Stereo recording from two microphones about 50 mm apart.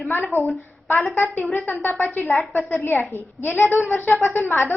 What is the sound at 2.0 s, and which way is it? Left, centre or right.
Speech, left.